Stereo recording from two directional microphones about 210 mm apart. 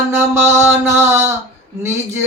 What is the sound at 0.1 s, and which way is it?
Music, 10° right (ahead or behind).